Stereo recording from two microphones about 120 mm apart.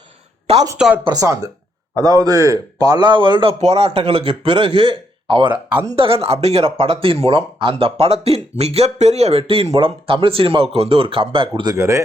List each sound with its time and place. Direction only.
1.0 s a man's voice: 30° right (ahead or behind)
3.6 s speech: 60° right (ahead or behind)
9.4 s speech: 50° right (ahead or behind)
11.7 s speech: 25° right (ahead or behind)